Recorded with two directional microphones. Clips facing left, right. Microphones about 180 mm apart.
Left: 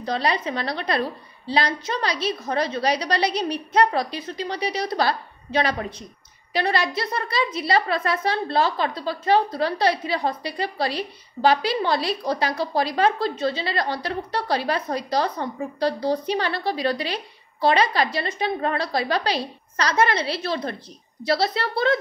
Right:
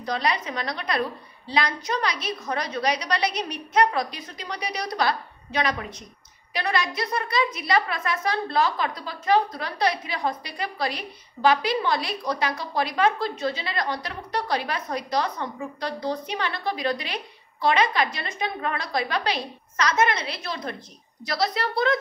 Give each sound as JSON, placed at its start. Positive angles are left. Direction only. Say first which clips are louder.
{"t": 0.0, "sound": "a woman's voice", "louder": "left 3 dB", "side_deg": 30}